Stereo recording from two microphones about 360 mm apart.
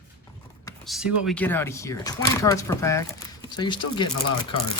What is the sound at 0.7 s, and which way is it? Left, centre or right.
Speech, centre.